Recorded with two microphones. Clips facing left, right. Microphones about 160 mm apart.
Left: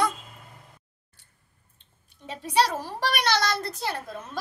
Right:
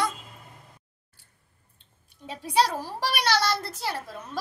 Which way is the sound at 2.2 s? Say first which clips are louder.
Even; 10° right (ahead or behind).